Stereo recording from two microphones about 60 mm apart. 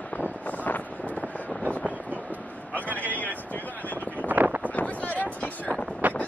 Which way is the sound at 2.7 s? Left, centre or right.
Left.